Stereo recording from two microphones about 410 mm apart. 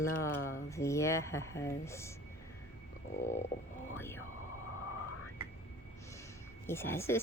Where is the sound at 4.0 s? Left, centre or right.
Centre.